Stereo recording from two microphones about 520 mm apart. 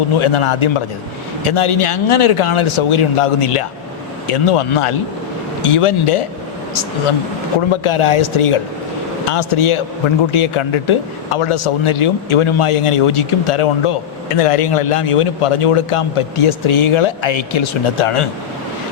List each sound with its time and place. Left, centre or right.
0.2 s a man's voice: left
7.7 s speech: left